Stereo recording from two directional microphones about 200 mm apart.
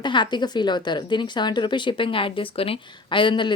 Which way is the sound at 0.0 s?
25° left (ahead or behind).